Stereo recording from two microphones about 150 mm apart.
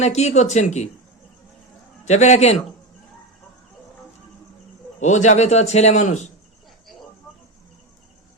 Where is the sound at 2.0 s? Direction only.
50° left (ahead or behind).